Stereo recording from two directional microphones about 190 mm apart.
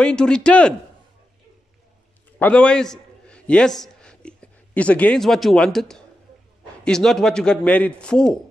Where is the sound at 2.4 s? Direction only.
5° left (ahead or behind).